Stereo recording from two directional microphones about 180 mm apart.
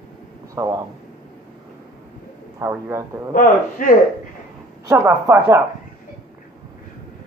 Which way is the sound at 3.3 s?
50° left (ahead or behind).